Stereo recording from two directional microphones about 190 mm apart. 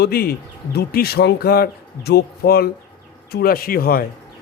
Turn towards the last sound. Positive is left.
turn(degrees=50)  # may be behind; listen again after turning